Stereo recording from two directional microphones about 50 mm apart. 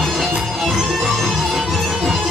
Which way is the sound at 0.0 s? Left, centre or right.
Centre.